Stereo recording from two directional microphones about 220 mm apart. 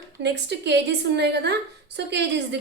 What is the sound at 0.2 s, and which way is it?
A woman's voice, 50° right (ahead or behind).